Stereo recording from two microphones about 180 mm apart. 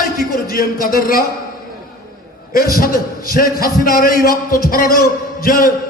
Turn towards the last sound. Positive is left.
turn(degrees=50)  # may be behind; listen again after turning